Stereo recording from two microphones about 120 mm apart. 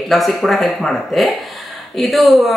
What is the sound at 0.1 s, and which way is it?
Speech, centre (ahead or behind).